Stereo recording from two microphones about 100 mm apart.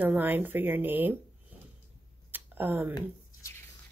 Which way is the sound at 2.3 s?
20° right (ahead or behind).